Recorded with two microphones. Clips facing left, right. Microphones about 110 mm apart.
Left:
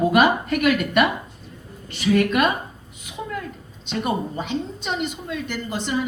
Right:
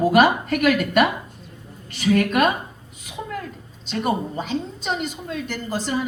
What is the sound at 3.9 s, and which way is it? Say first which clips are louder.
A woman's voice: right 1 dB; 40° right (ahead or behind).